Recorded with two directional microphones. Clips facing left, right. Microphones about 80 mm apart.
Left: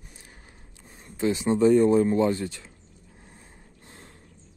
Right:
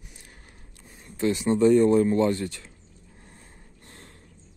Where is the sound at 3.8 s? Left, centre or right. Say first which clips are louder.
Even; centre.